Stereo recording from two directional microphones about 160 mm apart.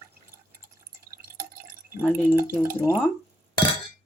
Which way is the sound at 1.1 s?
15° right (ahead or behind).